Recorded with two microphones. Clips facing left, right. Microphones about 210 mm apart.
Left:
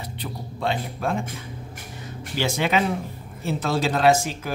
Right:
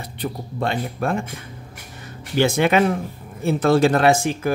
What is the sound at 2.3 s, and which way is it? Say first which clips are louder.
A man's voice: right 6 dB; 55° right (ahead or behind).